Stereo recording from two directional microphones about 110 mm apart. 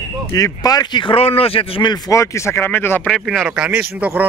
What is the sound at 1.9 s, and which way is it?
Speech, 30° left (ahead or behind).